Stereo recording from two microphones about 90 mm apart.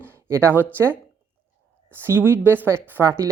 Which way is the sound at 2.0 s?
25° right (ahead or behind).